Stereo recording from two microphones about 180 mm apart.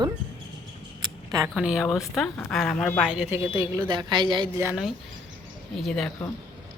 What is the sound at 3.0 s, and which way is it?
Speech, 5° right (ahead or behind).